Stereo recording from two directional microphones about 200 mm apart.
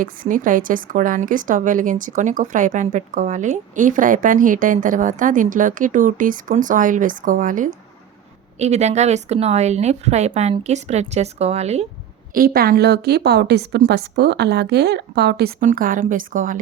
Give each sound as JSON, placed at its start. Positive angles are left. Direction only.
{"t": 0.0, "sound": "a woman's voice", "side_deg": -40}
{"t": 12.3, "sound": "a woman's voice", "side_deg": -50}
{"t": 15.6, "sound": "a woman's voice", "side_deg": -45}